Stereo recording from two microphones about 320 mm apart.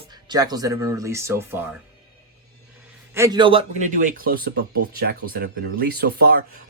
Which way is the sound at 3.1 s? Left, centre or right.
Centre.